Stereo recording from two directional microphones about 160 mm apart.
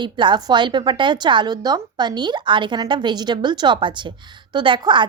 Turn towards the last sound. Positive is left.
turn(degrees=-30)  # may be behind; listen again after turning